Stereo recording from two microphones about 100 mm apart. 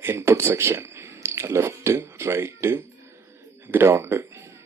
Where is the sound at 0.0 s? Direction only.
25° right (ahead or behind).